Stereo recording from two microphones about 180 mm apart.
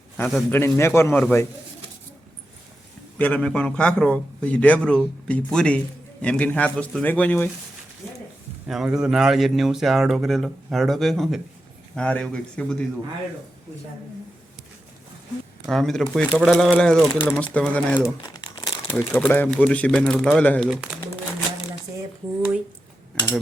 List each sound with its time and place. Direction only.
0.2 s speech: centre (ahead or behind)
0.5 s speech: 15° left (ahead or behind)
3.2 s speech: 10° left (ahead or behind)
8.6 s speech: 5° right (ahead or behind)
15.6 s speech: centre (ahead or behind)
17.2 s speech: 5° right (ahead or behind)
17.4 s speech: 5° left (ahead or behind)
18.3 s crumpling: 20° left (ahead or behind)
19.1 s speech: 10° left (ahead or behind)